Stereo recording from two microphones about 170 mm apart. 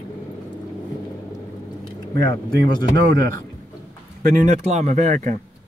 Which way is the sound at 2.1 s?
70° right (ahead or behind).